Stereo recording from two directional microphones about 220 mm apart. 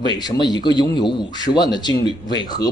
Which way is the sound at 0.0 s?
20° left (ahead or behind).